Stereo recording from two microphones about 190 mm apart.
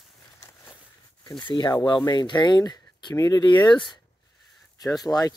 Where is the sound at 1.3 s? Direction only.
25° left (ahead or behind).